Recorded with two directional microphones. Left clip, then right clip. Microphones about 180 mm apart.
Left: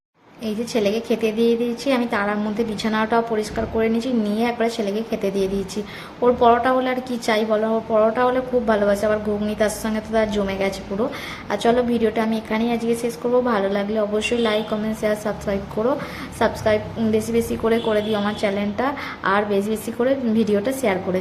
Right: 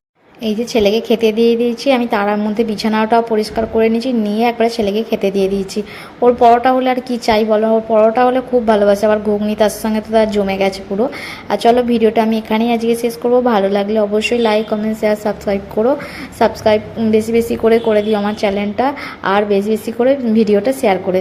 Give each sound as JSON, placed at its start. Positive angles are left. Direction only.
{"t": 0.4, "sound": "a woman's voice", "side_deg": -20}